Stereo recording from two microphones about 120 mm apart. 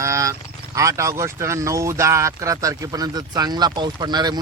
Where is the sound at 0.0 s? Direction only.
25° right (ahead or behind).